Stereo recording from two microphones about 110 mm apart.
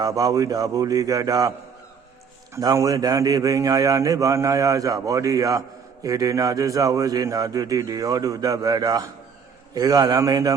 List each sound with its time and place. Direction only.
0.0 s a man's voice: 35° right (ahead or behind)
2.6 s a man's voice: 35° right (ahead or behind)